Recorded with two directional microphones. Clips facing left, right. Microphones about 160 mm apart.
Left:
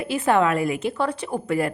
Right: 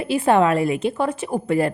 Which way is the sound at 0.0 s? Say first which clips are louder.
Right 3 dB; 25° right (ahead or behind).